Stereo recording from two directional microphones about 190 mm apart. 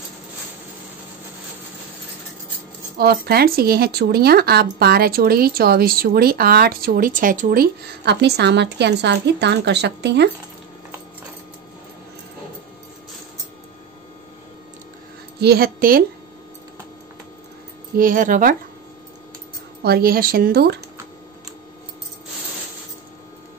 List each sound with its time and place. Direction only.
3.0 s speech: 55° right (ahead or behind)
15.4 s speech: 55° right (ahead or behind)
17.9 s speech: 45° right (ahead or behind)
19.8 s speech: 55° right (ahead or behind)